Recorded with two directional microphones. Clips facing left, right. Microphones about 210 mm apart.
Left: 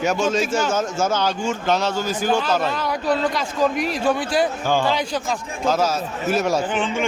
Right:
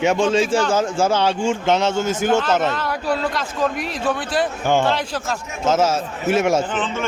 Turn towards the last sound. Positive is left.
turn(degrees=15)  # may be behind; listen again after turning